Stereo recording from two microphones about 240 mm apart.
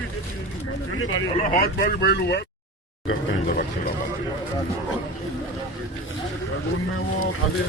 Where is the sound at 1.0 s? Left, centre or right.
Left.